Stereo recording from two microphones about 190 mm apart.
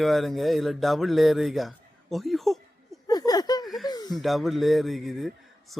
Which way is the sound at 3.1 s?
20° left (ahead or behind).